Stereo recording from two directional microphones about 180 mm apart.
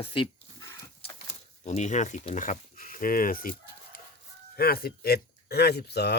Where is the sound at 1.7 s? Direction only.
40° left (ahead or behind); by 6.2 s 65° left (ahead or behind).